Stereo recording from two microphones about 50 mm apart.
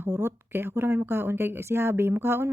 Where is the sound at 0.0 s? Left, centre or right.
Right.